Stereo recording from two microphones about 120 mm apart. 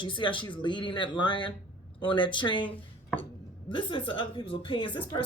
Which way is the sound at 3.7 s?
45° left (ahead or behind).